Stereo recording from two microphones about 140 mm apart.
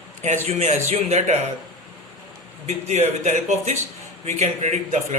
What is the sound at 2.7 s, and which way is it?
A man's voice, 50° right (ahead or behind).